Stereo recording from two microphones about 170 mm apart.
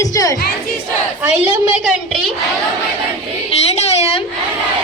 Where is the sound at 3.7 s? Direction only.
40° left (ahead or behind).